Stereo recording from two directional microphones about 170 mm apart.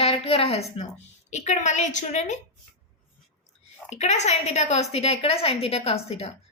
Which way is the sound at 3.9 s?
40° left (ahead or behind).